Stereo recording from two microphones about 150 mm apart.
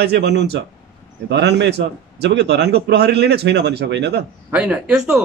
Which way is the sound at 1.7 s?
90° right.